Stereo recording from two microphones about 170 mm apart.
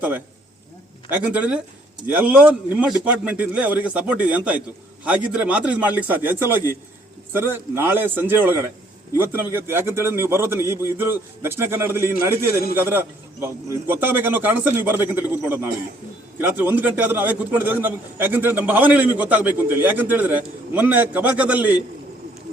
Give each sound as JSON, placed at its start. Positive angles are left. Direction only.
{"t": 1.1, "sound": "a man's voice", "side_deg": -10}
{"t": 7.3, "sound": "a man's voice", "side_deg": -15}